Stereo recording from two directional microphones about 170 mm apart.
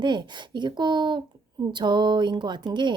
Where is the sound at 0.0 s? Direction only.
25° right (ahead or behind).